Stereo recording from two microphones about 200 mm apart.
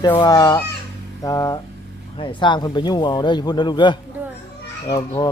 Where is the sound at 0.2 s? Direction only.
20° left (ahead or behind).